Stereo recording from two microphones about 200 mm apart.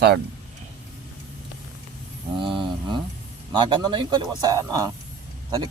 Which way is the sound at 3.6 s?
20° right (ahead or behind).